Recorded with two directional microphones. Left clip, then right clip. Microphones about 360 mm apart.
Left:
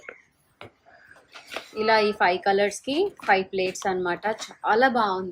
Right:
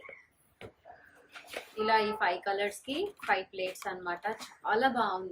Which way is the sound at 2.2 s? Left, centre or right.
Centre.